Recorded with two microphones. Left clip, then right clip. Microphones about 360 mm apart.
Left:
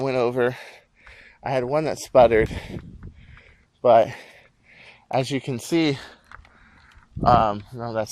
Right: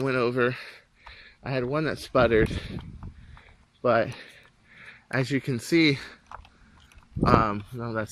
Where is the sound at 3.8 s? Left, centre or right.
Centre.